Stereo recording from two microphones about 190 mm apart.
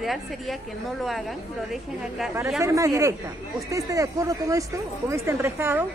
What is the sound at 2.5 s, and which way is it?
A woman's voice, 15° right (ahead or behind).